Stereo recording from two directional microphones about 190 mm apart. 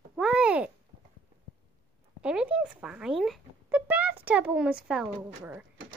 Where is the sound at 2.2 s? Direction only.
5° right (ahead or behind).